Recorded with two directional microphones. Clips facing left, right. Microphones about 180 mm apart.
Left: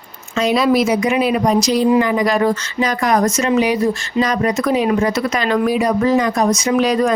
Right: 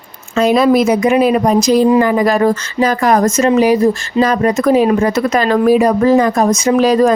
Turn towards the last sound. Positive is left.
turn(degrees=-40)  # may be behind; listen again after turning